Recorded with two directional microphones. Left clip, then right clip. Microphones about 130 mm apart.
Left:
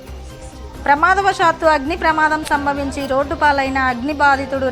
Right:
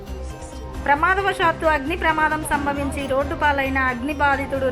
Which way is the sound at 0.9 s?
50° left (ahead or behind).